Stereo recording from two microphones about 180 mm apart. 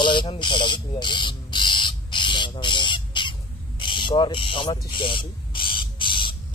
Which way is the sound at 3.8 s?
25° left (ahead or behind).